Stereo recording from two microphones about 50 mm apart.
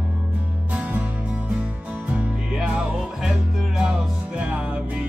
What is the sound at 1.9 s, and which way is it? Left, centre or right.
Music, right.